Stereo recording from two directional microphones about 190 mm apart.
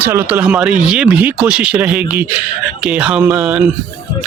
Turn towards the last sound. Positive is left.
turn(degrees=-5)  # may be behind; listen again after turning